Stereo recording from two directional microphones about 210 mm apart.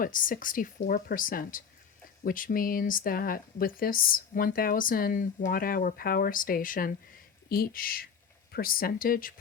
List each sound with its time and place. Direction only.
0.0 s speech: 40° left (ahead or behind)